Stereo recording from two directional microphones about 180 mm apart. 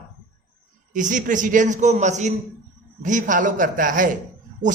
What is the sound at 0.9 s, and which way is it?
A man's voice, 45° right (ahead or behind).